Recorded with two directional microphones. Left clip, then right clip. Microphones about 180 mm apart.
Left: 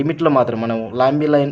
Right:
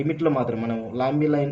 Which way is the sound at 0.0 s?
45° left (ahead or behind).